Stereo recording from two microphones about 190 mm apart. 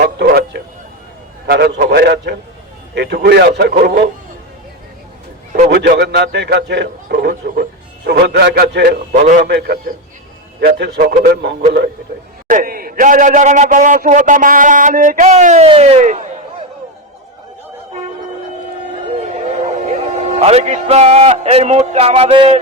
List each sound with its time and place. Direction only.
0.0 s a sound: 55° right (ahead or behind)
1.5 s a man's voice: 60° right (ahead or behind)
5.6 s a man's voice: 60° right (ahead or behind)
12.5 s a man's voice: 45° right (ahead or behind)
19.1 s speech: 35° right (ahead or behind)